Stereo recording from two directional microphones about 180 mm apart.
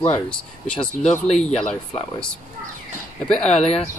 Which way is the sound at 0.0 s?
30° left (ahead or behind).